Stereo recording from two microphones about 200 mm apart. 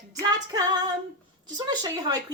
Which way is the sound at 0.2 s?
20° right (ahead or behind).